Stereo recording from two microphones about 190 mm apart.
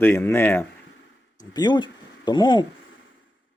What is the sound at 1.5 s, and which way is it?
Speech, 20° left (ahead or behind).